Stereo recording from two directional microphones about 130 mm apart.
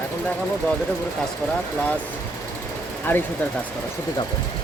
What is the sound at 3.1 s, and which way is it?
Speech, 15° left (ahead or behind).